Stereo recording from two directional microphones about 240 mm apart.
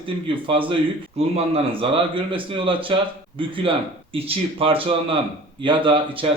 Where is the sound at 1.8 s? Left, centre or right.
Right.